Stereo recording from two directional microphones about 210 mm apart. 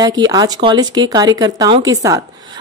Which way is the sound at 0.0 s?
20° right (ahead or behind).